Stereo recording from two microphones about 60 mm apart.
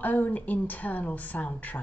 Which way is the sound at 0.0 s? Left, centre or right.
Left.